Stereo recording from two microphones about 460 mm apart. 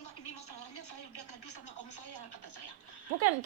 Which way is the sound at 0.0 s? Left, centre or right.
Left.